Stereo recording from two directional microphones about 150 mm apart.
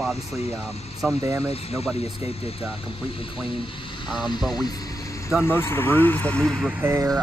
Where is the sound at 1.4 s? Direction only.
40° left (ahead or behind).